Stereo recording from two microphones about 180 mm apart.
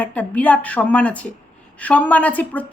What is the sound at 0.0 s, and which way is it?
A woman's voice, 10° left (ahead or behind).